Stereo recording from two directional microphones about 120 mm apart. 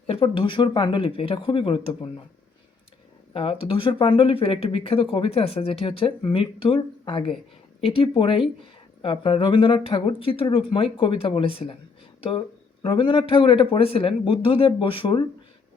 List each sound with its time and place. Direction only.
0.1 s speech: 50° left (ahead or behind)
3.3 s speech: 50° left (ahead or behind)
12.8 s speech: 45° left (ahead or behind)